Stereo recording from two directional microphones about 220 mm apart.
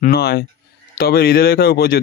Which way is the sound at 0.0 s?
45° left (ahead or behind).